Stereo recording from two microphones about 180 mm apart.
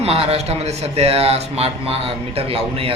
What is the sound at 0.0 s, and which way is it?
Speech, 35° right (ahead or behind).